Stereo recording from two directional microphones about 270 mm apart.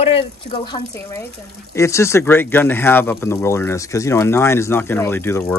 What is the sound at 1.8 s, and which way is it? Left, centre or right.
Speech, centre.